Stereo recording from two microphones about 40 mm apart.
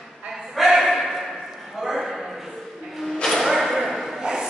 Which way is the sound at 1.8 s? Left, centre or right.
Centre.